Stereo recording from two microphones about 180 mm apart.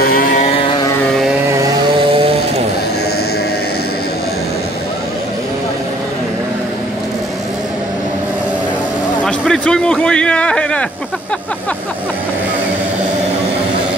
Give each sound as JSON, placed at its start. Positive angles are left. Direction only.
{"t": 0.0, "sound": "vehicle", "side_deg": 55}
{"t": 0.4, "sound": "vehicle", "side_deg": 35}
{"t": 9.2, "sound": "a man's voice", "side_deg": 5}